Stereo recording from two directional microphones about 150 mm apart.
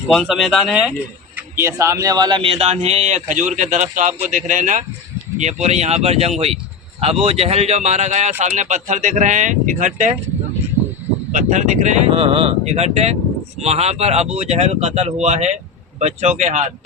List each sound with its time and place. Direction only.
0.1 s speech: centre (ahead or behind)
1.4 s a sound: 15° right (ahead or behind)
1.7 s a man's voice: 20° right (ahead or behind); by 10.2 s 55° right (ahead or behind)
11.3 s a man's voice: 55° right (ahead or behind)